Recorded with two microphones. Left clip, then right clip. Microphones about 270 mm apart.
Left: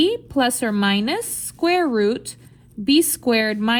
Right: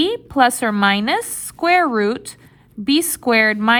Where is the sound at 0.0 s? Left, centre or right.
Right.